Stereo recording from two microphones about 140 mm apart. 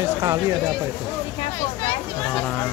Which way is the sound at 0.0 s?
20° right (ahead or behind).